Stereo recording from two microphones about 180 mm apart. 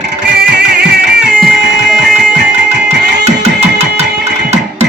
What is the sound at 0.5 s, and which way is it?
Music, 70° right (ahead or behind).